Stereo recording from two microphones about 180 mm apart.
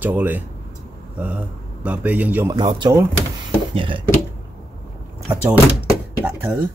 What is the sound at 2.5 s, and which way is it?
Speech, 25° right (ahead or behind).